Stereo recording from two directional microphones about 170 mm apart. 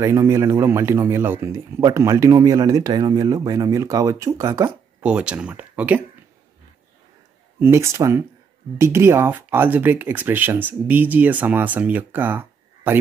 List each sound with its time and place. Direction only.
0.0 s a man's voice: 15° right (ahead or behind)
7.6 s a man's voice: 15° right (ahead or behind)